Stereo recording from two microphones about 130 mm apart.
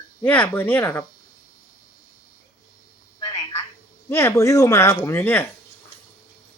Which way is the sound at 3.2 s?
35° left (ahead or behind).